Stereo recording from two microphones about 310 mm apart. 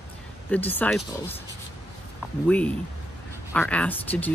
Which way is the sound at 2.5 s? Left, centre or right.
Centre.